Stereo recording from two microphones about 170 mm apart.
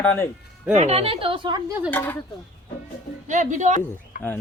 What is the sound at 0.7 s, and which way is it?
Speech, 40° right (ahead or behind).